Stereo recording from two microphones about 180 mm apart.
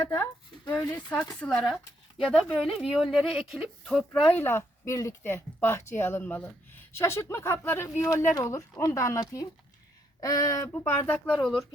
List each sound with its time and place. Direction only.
0.1 s a woman's voice: 15° left (ahead or behind)